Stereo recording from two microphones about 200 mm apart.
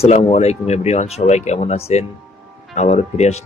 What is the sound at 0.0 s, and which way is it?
Speech, 30° left (ahead or behind).